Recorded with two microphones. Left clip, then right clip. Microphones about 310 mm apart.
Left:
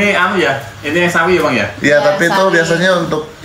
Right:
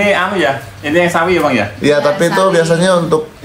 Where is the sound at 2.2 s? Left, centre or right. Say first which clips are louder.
Even; centre.